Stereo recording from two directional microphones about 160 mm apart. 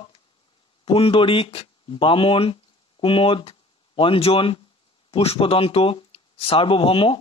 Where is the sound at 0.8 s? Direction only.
35° left (ahead or behind).